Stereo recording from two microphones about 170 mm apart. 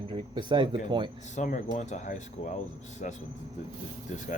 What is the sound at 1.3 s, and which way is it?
Speech, 45° left (ahead or behind).